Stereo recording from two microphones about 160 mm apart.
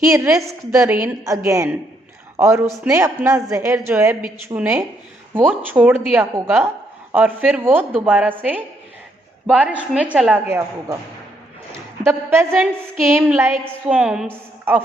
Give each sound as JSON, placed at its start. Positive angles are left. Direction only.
{"t": 0.0, "sound": "a woman's voice", "side_deg": -20}
{"t": 12.0, "sound": "a woman's voice", "side_deg": -15}